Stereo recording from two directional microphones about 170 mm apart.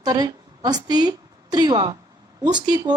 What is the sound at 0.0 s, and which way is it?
A woman's voice, 20° right (ahead or behind).